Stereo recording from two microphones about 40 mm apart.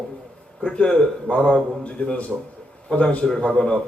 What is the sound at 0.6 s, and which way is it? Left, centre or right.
A man's voice, left.